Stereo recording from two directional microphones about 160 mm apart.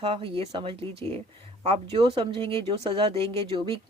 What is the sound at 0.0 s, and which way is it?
Speech, 35° right (ahead or behind).